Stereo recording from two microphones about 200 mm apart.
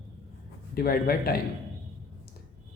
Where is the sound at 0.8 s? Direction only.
50° left (ahead or behind).